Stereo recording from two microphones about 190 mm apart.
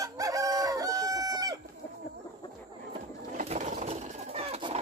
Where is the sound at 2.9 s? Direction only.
35° right (ahead or behind).